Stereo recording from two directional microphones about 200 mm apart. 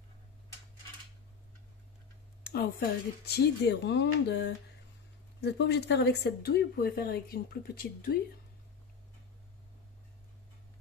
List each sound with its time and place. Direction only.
2.4 s speech: 50° left (ahead or behind)